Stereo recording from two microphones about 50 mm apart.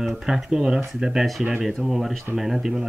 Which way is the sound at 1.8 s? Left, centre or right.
Centre.